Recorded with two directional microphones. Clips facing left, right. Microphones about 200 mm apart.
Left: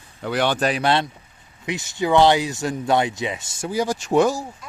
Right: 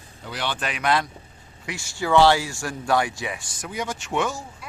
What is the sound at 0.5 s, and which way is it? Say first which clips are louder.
Speech: left 4 dB; 35° left (ahead or behind).